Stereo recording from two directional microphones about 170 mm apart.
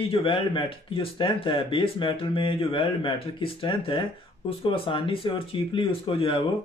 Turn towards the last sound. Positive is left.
turn(degrees=30)  # may be behind; listen again after turning